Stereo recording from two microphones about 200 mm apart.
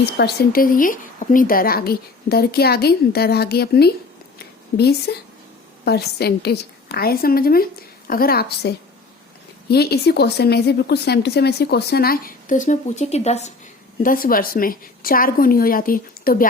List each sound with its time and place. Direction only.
0.0 s a woman's voice: 55° left (ahead or behind); by 13.5 s 35° left (ahead or behind)
14.0 s a woman's voice: 45° left (ahead or behind)